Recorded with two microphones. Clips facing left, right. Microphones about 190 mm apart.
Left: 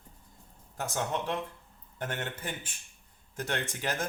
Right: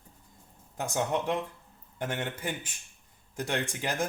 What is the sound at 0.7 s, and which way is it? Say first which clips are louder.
A man's voice: right 3 dB; 15° right (ahead or behind).